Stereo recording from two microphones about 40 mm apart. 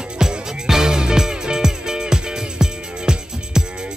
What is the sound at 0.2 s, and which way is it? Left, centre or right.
Music, centre.